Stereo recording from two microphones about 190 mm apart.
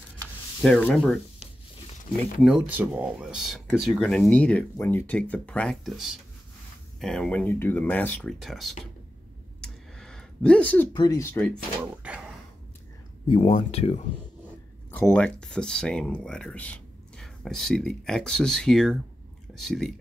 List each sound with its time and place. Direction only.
0.6 s speech: 5° left (ahead or behind)
2.4 s speech: centre (ahead or behind)
9.6 s a sound: 5° left (ahead or behind)
10.9 s speech: 20° left (ahead or behind)
11.8 s speech: 10° right (ahead or behind)
13.3 s speech: 30° left (ahead or behind)
14.9 s speech: 10° left (ahead or behind)